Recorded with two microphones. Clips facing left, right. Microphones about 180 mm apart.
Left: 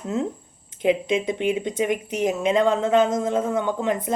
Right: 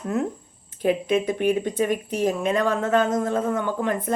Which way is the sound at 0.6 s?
20° left (ahead or behind).